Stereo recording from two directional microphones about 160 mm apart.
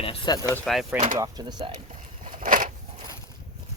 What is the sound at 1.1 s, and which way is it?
Speech, 25° right (ahead or behind).